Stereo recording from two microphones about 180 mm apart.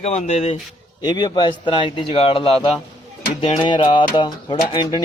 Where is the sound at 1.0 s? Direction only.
25° left (ahead or behind).